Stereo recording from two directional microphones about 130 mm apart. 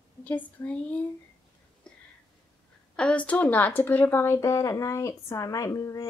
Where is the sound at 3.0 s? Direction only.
10° left (ahead or behind).